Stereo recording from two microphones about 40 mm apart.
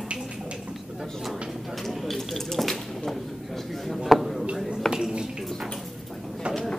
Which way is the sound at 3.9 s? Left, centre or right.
Centre.